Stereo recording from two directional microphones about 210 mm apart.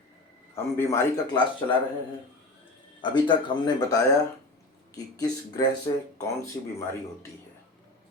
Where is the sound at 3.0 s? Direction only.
20° left (ahead or behind).